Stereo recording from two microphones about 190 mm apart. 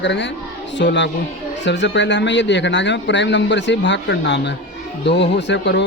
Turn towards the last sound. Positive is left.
turn(degrees=65)  # may be behind; listen again after turning